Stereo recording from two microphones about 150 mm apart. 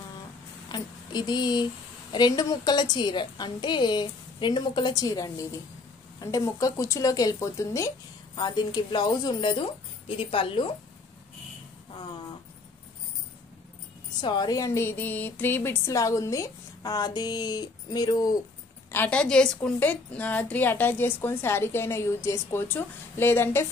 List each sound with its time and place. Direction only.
0.7 s a woman's voice: 30° left (ahead or behind)
14.2 s speech: 30° left (ahead or behind)
18.9 s a woman's voice: 10° left (ahead or behind)